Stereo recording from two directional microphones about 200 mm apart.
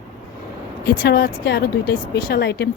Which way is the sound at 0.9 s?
50° left (ahead or behind).